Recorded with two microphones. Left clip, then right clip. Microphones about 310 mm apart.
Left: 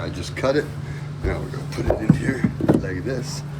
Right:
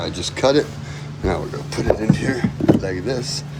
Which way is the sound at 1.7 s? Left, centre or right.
Right.